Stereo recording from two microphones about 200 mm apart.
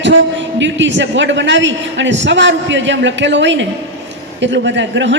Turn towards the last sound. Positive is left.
turn(degrees=-65)  # may be behind; listen again after turning